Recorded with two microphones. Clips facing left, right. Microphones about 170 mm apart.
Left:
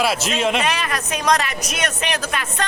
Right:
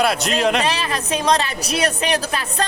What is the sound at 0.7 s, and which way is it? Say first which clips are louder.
A woman's voice: right 1 dB; 30° right (ahead or behind).